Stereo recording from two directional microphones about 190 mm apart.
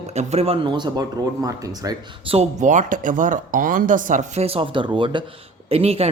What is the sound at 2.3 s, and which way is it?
Speech, 35° right (ahead or behind).